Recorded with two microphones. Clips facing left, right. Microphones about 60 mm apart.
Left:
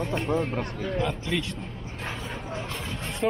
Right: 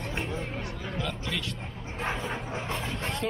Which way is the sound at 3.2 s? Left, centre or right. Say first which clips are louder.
Left 8 dB; centre.